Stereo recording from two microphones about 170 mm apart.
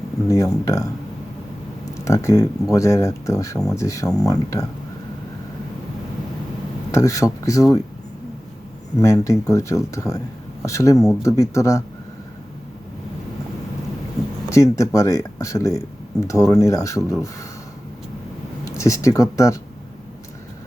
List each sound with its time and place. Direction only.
0.6 s speech: 20° left (ahead or behind)
2.0 s speech: 15° left (ahead or behind)
6.9 s speech: 20° left (ahead or behind)
9.0 s speech: 20° left (ahead or behind)
14.5 s speech: 15° left (ahead or behind)
18.6 s speech: 20° left (ahead or behind)